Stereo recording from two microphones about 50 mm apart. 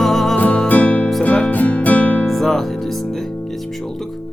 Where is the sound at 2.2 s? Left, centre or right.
Centre.